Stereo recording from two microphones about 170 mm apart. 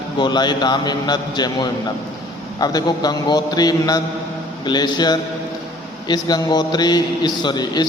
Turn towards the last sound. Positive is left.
turn(degrees=25)  # may be behind; listen again after turning